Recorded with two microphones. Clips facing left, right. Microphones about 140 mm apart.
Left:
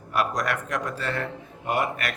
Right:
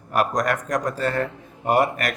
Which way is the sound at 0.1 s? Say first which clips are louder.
Right 4 dB; 45° right (ahead or behind).